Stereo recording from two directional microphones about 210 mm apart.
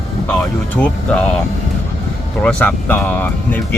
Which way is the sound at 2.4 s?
5° left (ahead or behind).